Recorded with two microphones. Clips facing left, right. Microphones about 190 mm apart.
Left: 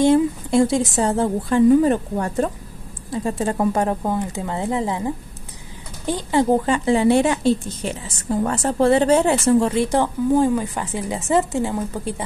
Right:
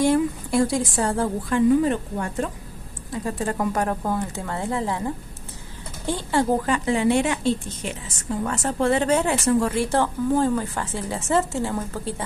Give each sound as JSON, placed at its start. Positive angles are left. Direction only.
{"t": 0.0, "sound": "speech", "side_deg": 25}
{"t": 1.9, "sound": "a woman's voice", "side_deg": 40}
{"t": 3.1, "sound": "a woman's voice", "side_deg": 25}